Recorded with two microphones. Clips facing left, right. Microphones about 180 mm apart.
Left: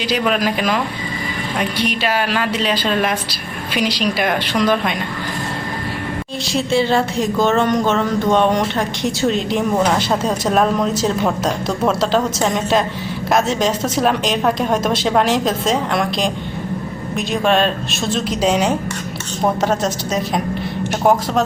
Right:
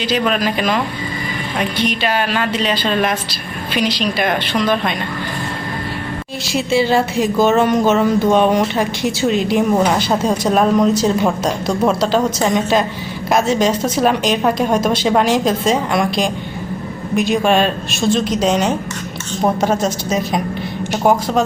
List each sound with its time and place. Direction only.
0.1 s a woman's voice: 5° left (ahead or behind)
6.5 s speech: 5° right (ahead or behind)